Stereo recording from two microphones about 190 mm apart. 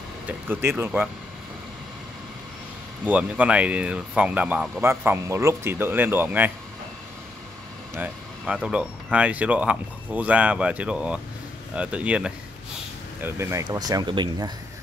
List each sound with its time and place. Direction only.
0.3 s speech: 10° right (ahead or behind)
3.1 s speech: 5° right (ahead or behind)
7.9 s speech: 5° right (ahead or behind); by 14.5 s 25° right (ahead or behind)